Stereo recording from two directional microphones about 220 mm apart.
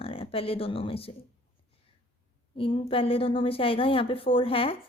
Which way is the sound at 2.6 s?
25° left (ahead or behind).